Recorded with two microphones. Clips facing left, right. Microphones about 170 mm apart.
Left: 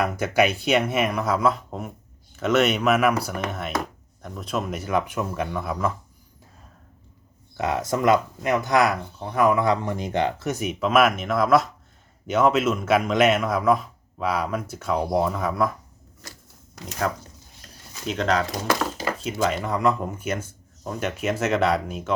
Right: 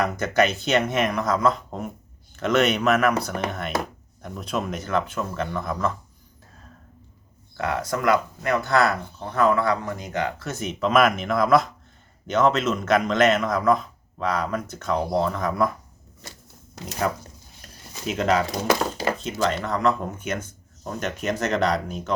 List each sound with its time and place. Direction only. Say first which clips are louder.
0.0 s a man's voice: even; 10° left (ahead or behind)
7.5 s a man's voice: left 2 dB; 20° left (ahead or behind)
10.5 s a man's voice: right 1 dB; 10° left (ahead or behind)
16.2 s a sound: right 1 dB; 25° right (ahead or behind)
18.0 s speech: right 1 dB; 5° right (ahead or behind)
19.3 s a man's voice: left 3 dB; 5° left (ahead or behind)